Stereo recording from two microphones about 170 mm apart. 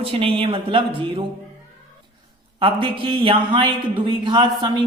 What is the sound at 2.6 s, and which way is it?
A man's voice, 30° right (ahead or behind).